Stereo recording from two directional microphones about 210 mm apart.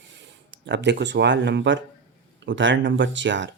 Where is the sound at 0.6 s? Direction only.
55° right (ahead or behind).